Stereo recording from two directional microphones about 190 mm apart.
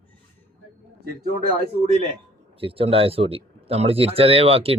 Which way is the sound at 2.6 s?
30° right (ahead or behind).